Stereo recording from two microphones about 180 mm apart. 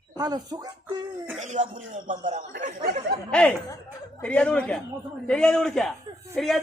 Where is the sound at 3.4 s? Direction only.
5° left (ahead or behind).